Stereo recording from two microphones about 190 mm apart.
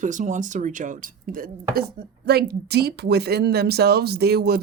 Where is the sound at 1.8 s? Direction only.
55° right (ahead or behind).